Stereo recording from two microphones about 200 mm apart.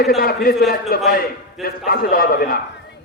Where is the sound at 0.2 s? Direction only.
45° left (ahead or behind).